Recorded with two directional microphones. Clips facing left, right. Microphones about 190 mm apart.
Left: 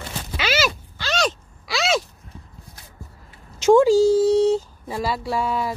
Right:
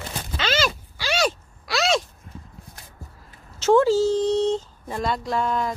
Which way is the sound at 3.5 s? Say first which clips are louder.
Left 3 dB; 15° left (ahead or behind).